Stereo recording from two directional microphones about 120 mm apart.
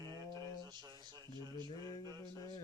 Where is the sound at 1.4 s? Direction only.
35° right (ahead or behind).